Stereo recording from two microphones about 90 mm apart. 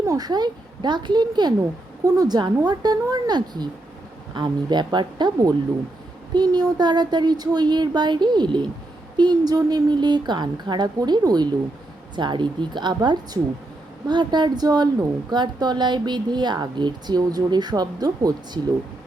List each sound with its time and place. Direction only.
0.0 s a woman's voice: 40° right (ahead or behind)